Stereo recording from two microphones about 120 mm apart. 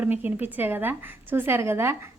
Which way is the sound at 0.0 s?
15° right (ahead or behind).